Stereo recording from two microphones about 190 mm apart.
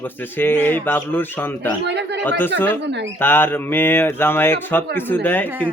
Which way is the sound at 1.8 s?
65° right (ahead or behind).